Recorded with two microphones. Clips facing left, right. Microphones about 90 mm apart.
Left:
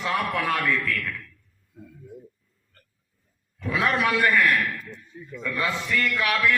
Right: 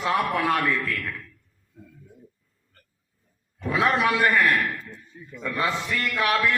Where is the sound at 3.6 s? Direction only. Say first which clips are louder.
Right 2 dB; 25° right (ahead or behind).